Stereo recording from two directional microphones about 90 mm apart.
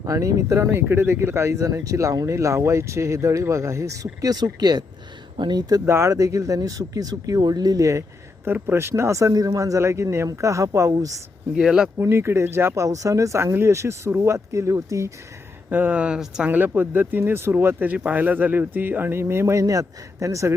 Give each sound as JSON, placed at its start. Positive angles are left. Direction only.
{"t": 0.0, "sound": "speech", "side_deg": -35}
{"t": 5.8, "sound": "speech", "side_deg": -25}
{"t": 6.1, "sound": "speech", "side_deg": -40}
{"t": 8.4, "sound": "speech", "side_deg": -25}
{"t": 11.5, "sound": "speech", "side_deg": -5}
{"t": 11.9, "sound": "speech", "side_deg": -30}
{"t": 15.7, "sound": "speech", "side_deg": -20}
{"t": 16.5, "sound": "speech", "side_deg": -20}